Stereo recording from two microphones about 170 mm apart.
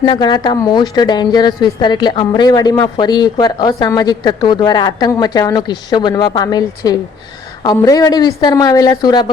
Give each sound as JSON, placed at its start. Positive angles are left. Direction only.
{"t": 0.0, "sound": "speech", "side_deg": 25}